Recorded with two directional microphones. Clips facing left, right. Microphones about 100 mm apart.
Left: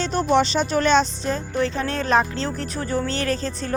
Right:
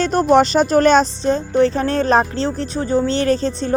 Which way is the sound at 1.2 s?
35° right (ahead or behind).